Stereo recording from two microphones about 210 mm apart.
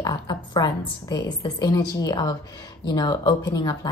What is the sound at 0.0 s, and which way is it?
A woman's voice, 20° left (ahead or behind).